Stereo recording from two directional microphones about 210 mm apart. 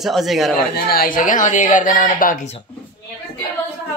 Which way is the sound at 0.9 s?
45° left (ahead or behind).